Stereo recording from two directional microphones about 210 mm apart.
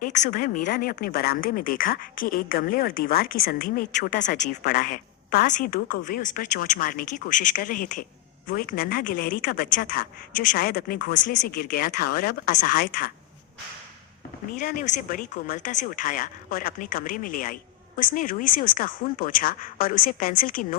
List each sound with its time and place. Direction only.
0.0 s a woman's voice: 40° left (ahead or behind)
14.6 s speech: 40° left (ahead or behind)